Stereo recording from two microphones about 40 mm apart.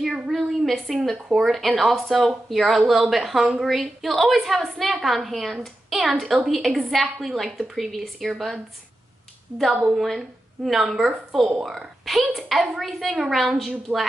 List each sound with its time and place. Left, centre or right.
0.0 s a woman's voice: centre
9.7 s a woman's voice: right
10.1 s a woman's voice: centre